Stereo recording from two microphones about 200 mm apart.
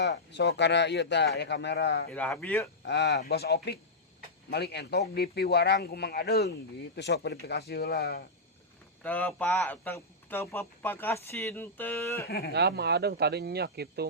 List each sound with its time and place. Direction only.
0.0 s a man's voice: 60° left (ahead or behind)
2.0 s speech: 5° left (ahead or behind)
2.8 s a man's voice: 60° left (ahead or behind)
9.0 s speech: 10° left (ahead or behind)
12.5 s speech: 55° right (ahead or behind)